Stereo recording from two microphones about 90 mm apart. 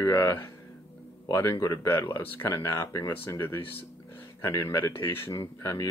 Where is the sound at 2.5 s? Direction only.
35° left (ahead or behind).